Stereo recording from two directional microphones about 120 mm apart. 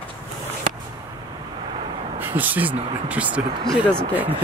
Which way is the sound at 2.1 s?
15° right (ahead or behind).